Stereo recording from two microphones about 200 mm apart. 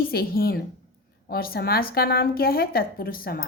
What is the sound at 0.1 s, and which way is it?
A woman's voice, 50° left (ahead or behind).